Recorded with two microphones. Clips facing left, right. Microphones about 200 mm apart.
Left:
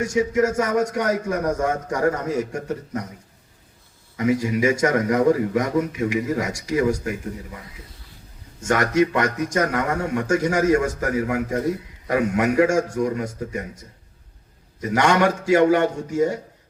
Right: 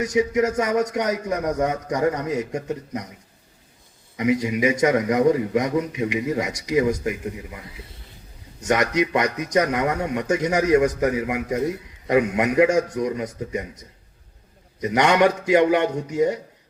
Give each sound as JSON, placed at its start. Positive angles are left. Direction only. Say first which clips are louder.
{"t": 0.0, "sound": "a man's voice", "louder": "even", "side_deg": -20}
{"t": 4.2, "sound": "a man's voice", "louder": "even", "side_deg": -20}
{"t": 8.6, "sound": "a man's voice", "louder": "left 2 dB", "side_deg": -20}
{"t": 14.8, "sound": "a man's voice", "louder": "right 1 dB", "side_deg": -20}